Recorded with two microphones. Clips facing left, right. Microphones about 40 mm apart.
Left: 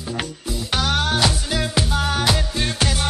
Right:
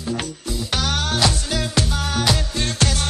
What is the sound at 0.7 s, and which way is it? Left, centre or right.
Music, centre.